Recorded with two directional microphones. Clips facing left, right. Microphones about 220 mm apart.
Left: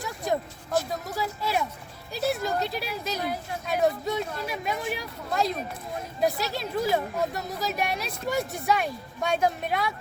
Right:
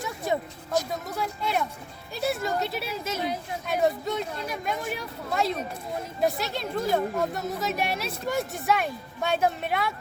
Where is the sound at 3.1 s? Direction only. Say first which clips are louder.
Right 1 dB; 20° right (ahead or behind).